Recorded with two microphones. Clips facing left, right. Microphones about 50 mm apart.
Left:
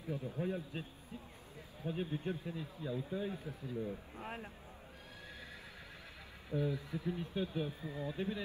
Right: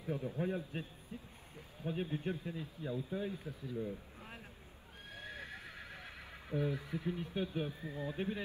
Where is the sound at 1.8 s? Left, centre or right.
Right.